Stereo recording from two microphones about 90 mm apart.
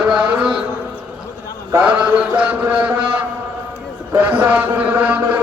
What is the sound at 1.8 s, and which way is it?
A man's voice, 10° right (ahead or behind).